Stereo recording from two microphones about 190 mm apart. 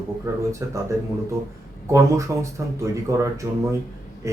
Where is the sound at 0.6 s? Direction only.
15° right (ahead or behind).